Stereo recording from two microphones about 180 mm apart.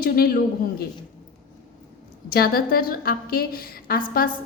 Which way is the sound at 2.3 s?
55° left (ahead or behind).